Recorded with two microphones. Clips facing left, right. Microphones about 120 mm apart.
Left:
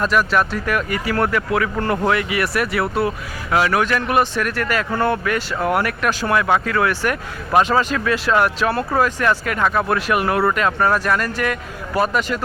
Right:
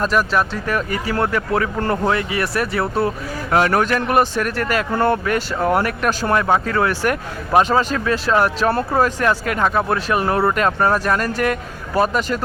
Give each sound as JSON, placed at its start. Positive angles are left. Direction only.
{"t": 0.0, "sound": "speech", "side_deg": -35}